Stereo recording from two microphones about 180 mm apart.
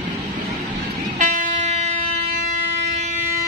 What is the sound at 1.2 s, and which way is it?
Music, 40° right (ahead or behind).